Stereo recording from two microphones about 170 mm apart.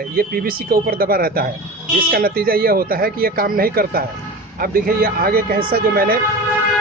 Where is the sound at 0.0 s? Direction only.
60° right (ahead or behind).